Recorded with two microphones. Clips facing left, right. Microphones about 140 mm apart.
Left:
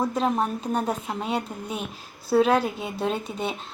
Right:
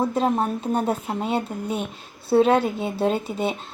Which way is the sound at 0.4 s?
5° right (ahead or behind).